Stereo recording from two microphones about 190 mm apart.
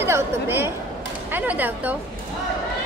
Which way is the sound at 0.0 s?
15° right (ahead or behind).